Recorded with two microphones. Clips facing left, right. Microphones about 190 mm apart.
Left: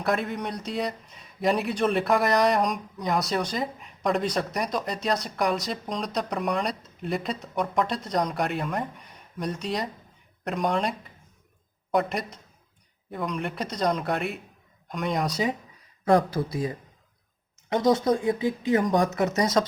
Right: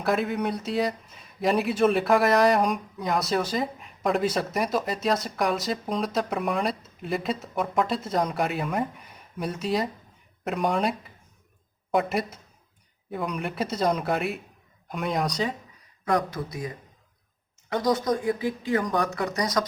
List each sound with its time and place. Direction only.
0.0 s speech: centre (ahead or behind)
16.0 s speech: 30° left (ahead or behind)